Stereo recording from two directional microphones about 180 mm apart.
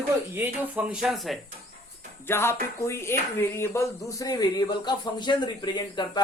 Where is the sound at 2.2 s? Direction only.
15° left (ahead or behind).